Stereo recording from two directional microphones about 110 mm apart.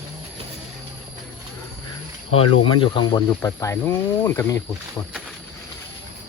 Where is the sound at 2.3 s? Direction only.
55° left (ahead or behind).